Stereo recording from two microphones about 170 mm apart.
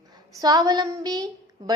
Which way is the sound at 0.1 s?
25° right (ahead or behind).